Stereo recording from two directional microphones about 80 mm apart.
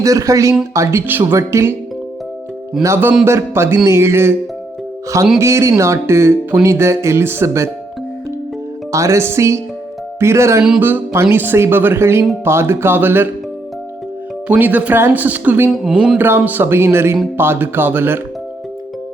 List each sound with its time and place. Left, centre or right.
0.0 s speech: right
2.8 s speech: right
5.4 s speech: right
8.9 s speech: right
14.4 s speech: centre
15.7 s speech: centre
16.1 s speech: right